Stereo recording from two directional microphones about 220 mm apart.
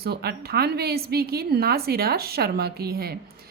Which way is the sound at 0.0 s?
45° right (ahead or behind).